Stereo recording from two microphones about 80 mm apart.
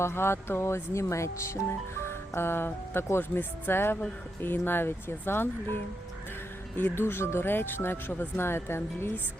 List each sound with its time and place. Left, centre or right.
0.0 s speech: left
6.7 s speech: left